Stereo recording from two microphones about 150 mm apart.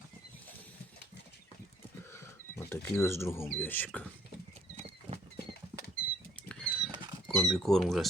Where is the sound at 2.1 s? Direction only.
15° left (ahead or behind).